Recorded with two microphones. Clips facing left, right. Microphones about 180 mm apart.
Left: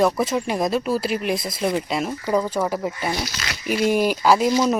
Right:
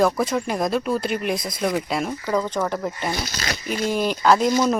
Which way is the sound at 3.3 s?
40° right (ahead or behind).